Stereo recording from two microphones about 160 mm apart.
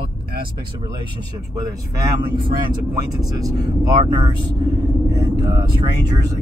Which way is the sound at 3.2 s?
20° right (ahead or behind).